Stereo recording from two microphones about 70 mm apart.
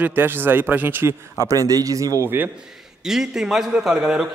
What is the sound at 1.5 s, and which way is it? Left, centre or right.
Speech, right.